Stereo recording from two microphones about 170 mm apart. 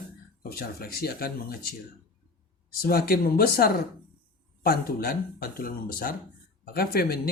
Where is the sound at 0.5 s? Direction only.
60° left (ahead or behind).